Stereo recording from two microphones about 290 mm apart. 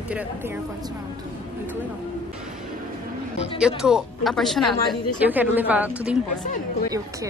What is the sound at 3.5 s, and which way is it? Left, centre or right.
A woman's voice, centre.